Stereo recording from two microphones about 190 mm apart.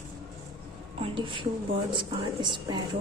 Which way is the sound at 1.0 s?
25° right (ahead or behind).